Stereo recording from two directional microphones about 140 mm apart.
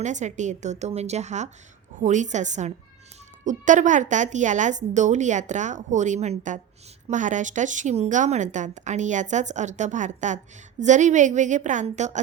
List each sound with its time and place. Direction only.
0.0 s speech: 60° right (ahead or behind)